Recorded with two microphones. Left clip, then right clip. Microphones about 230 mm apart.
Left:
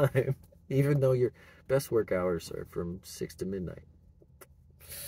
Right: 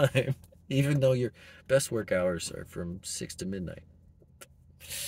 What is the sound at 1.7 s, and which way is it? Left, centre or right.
Speech, centre.